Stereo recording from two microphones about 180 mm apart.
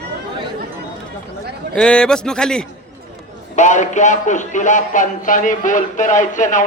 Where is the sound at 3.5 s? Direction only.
40° left (ahead or behind).